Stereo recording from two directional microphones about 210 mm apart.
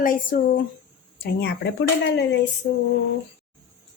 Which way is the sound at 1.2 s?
50° left (ahead or behind).